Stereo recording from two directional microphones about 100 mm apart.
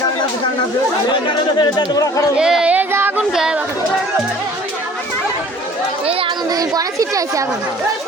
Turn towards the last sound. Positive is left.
turn(degrees=-35)  # may be behind; listen again after turning